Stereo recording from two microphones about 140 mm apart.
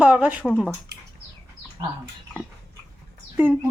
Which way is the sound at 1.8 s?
30° right (ahead or behind).